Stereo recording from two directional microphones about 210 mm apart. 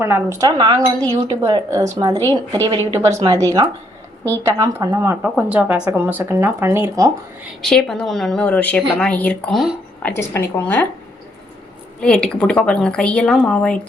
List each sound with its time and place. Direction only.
0.0 s speech: 15° right (ahead or behind)
7.6 s a woman's voice: 5° left (ahead or behind)
11.9 s a woman's voice: 5° left (ahead or behind)